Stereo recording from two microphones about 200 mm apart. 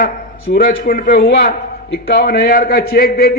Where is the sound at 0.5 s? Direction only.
50° left (ahead or behind).